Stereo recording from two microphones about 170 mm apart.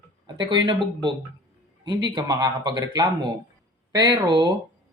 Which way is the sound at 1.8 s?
25° right (ahead or behind).